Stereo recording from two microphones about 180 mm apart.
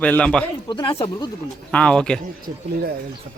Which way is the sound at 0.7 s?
25° left (ahead or behind).